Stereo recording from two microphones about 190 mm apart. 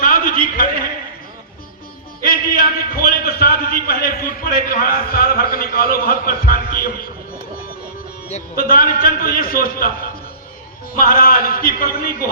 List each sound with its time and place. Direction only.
0.0 s a sound: 50° left (ahead or behind)
2.2 s a man's voice: 50° left (ahead or behind)
8.5 s a man's voice: 50° left (ahead or behind)
10.9 s a man's voice: 50° left (ahead or behind)